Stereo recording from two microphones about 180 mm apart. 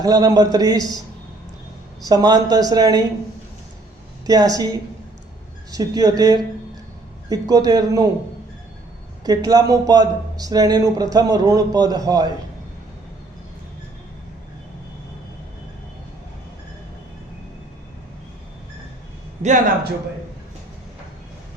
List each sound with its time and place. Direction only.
0.0 s speech: 20° right (ahead or behind)
2.0 s speech: 20° right (ahead or behind)
4.3 s speech: 20° right (ahead or behind)
9.2 s speech: 20° right (ahead or behind)
19.4 s speech: 40° right (ahead or behind)